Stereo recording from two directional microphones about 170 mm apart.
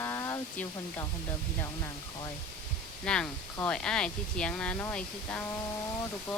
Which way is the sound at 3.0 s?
5° left (ahead or behind).